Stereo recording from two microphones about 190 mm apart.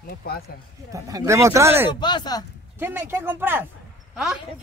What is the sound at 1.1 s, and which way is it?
Speech, 15° right (ahead or behind).